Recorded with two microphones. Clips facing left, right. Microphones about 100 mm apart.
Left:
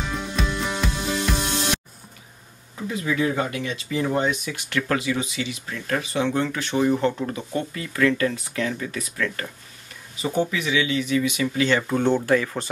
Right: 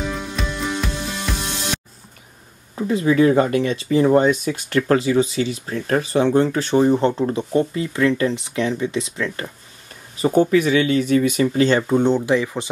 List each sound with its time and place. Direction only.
0.0 s music: centre (ahead or behind)
2.9 s speech: 35° right (ahead or behind)
10.1 s speech: 45° right (ahead or behind)
11.9 s speech: 15° right (ahead or behind)